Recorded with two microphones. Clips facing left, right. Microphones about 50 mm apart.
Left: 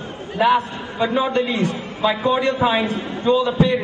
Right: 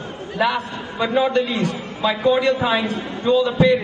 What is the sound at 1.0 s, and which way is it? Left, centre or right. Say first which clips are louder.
Speech: right 1 dB; centre.